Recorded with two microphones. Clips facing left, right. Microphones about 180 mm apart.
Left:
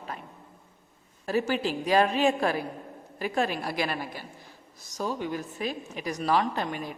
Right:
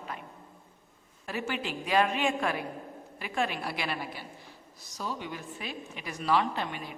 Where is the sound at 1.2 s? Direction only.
40° left (ahead or behind).